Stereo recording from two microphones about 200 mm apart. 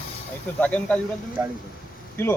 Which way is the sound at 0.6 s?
5° left (ahead or behind).